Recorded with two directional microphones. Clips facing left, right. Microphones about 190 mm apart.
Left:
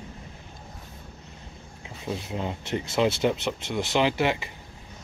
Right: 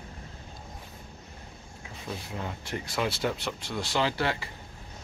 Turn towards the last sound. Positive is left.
turn(degrees=15)  # may be behind; listen again after turning